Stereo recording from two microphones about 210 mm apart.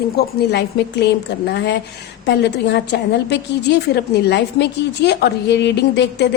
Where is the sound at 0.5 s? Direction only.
55° left (ahead or behind).